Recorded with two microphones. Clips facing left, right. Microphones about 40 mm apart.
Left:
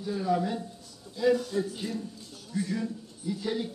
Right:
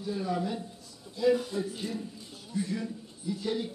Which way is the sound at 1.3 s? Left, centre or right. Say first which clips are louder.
Left 1 dB; centre.